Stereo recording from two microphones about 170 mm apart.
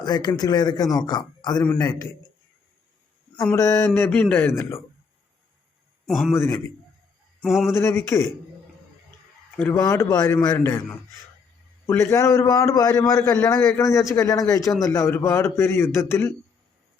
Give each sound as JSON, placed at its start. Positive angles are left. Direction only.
{"t": 0.0, "sound": "a man's voice", "side_deg": 25}
{"t": 3.4, "sound": "a man's voice", "side_deg": 15}
{"t": 6.1, "sound": "a man's voice", "side_deg": 0}
{"t": 6.3, "sound": "a man's voice", "side_deg": 15}
{"t": 7.4, "sound": "a man's voice", "side_deg": 0}
{"t": 7.7, "sound": "a man's voice", "side_deg": 15}
{"t": 9.7, "sound": "a man's voice", "side_deg": 20}
{"t": 11.9, "sound": "a man's voice", "side_deg": 15}